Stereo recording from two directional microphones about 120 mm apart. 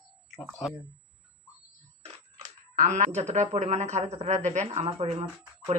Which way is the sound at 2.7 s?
85° right.